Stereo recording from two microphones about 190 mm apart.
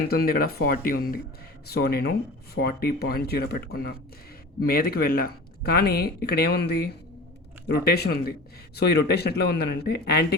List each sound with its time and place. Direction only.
0.1 s a man's voice: 50° left (ahead or behind)
7.9 s a man's voice: 55° left (ahead or behind)